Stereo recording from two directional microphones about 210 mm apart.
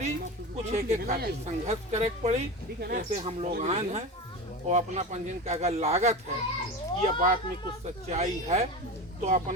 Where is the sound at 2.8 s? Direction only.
45° right (ahead or behind).